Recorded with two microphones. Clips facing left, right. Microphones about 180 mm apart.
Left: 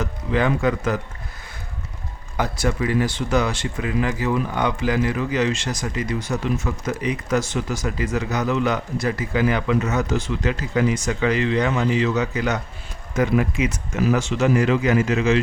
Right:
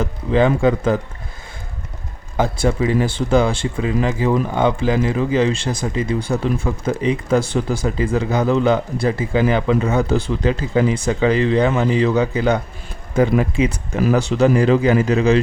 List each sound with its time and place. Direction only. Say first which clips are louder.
0.0 s speech: right 5 dB; 25° right (ahead or behind)
2.3 s a man's voice: right 5 dB; 25° right (ahead or behind)